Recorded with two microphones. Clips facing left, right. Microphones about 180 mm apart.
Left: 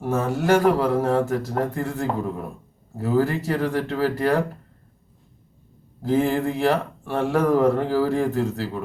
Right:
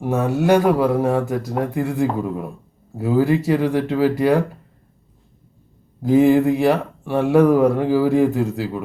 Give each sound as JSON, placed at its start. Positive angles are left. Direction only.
{"t": 0.0, "sound": "speech", "side_deg": -15}
{"t": 6.0, "sound": "speech", "side_deg": -15}